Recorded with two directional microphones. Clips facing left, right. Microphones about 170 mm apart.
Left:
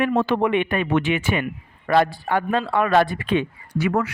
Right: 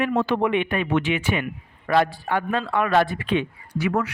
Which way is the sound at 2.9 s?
45° left (ahead or behind).